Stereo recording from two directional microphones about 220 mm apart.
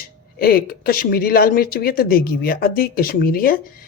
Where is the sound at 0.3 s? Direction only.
45° left (ahead or behind).